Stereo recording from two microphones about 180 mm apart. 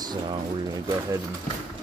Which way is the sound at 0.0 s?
25° right (ahead or behind).